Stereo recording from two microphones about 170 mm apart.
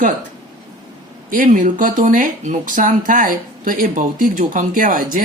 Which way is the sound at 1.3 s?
50° right (ahead or behind).